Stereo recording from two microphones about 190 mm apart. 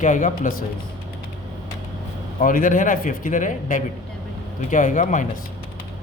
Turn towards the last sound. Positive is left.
turn(degrees=40)  # may be behind; listen again after turning